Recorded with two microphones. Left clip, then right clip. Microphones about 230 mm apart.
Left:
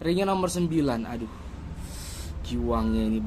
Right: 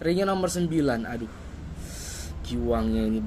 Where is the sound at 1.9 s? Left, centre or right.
Centre.